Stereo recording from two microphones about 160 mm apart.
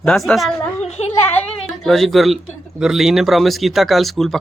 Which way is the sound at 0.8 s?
45° left (ahead or behind).